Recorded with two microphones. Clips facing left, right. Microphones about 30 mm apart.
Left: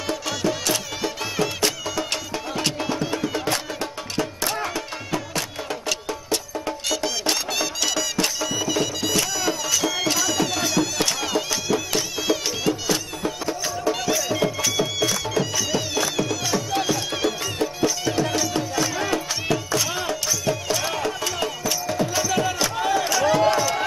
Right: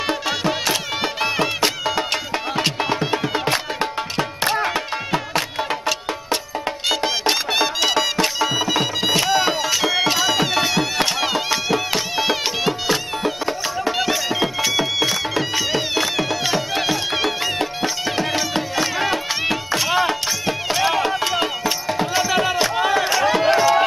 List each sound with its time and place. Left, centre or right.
0.0 s music: right
6.9 s music: right